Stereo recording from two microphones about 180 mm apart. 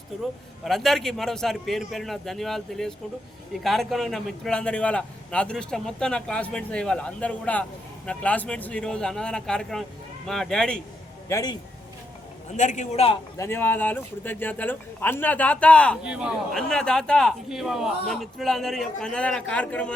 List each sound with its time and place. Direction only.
0.6 s a man's voice: centre (ahead or behind)
11.3 s speech: 20° left (ahead or behind)
12.5 s a man's voice: 40° left (ahead or behind)
13.4 s speech: 10° left (ahead or behind)
16.0 s a man's voice: 5° right (ahead or behind)